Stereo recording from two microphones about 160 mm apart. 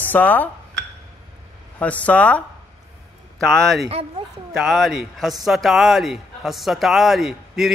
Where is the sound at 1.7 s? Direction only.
10° left (ahead or behind).